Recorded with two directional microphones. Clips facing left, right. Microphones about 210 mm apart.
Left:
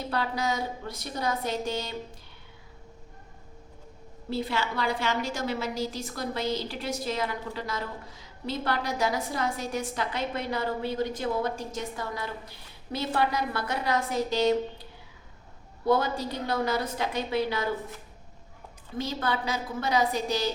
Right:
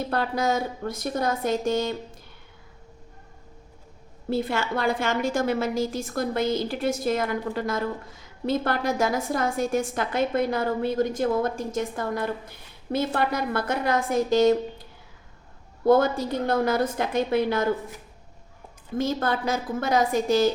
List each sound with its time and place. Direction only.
0.1 s a woman's voice: 50° right (ahead or behind)
4.3 s a woman's voice: 50° right (ahead or behind)
15.9 s a woman's voice: 50° right (ahead or behind)
18.9 s a woman's voice: 50° right (ahead or behind)